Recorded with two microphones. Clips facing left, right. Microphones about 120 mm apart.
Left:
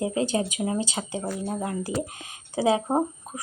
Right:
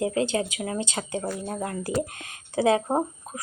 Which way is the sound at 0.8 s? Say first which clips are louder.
Even; 10° left (ahead or behind).